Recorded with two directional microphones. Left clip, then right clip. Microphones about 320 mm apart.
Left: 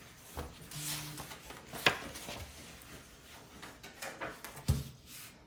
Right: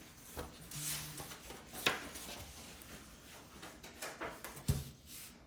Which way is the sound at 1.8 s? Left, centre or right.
Centre.